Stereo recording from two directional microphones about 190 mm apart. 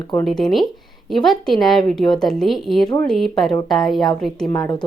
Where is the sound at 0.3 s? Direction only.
Centre (ahead or behind).